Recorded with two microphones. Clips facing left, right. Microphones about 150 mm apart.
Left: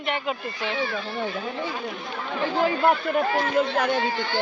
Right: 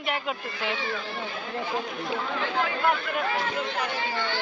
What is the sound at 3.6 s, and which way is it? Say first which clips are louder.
Speech: left 8 dB; 50° left (ahead or behind).